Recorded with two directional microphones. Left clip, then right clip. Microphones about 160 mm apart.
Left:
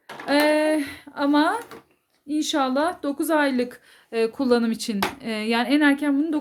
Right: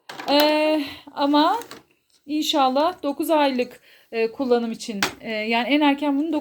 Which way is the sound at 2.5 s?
Centre (ahead or behind).